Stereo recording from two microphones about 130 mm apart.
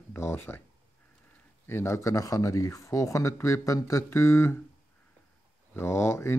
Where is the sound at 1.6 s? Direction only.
20° left (ahead or behind).